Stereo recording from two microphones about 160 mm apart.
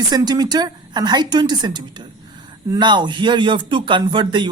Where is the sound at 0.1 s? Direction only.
25° right (ahead or behind).